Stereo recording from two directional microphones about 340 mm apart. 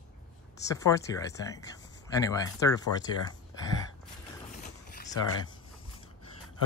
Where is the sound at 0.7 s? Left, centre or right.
Centre.